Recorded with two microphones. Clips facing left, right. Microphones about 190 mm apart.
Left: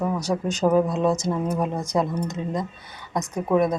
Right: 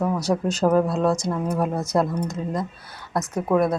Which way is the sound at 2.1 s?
10° left (ahead or behind).